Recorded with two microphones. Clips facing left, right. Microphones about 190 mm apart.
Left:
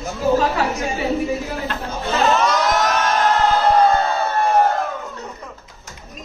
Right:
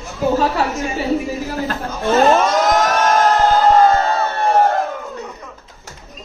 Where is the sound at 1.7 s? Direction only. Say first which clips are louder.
Right 8 dB; 45° right (ahead or behind).